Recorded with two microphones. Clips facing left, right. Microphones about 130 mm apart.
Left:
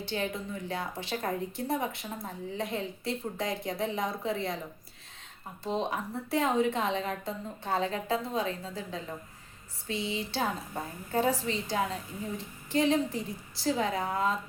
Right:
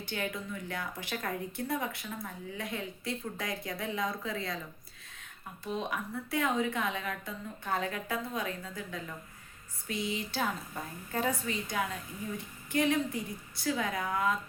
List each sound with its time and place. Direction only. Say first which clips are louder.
0.0 s speech: left 3 dB; 25° left (ahead or behind)
5.6 s speech: left 4 dB; 30° left (ahead or behind)